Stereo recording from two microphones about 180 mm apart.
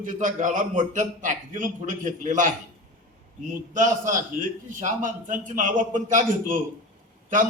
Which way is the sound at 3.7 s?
45° right (ahead or behind).